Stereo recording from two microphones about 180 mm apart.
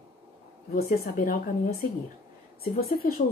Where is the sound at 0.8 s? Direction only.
50° left (ahead or behind).